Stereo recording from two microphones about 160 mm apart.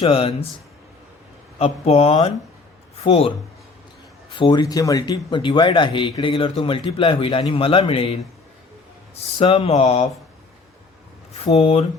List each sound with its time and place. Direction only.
0.0 s speech: 35° left (ahead or behind)
1.5 s speech: 40° left (ahead or behind)
4.4 s speech: 30° left (ahead or behind)
11.4 s speech: 35° left (ahead or behind)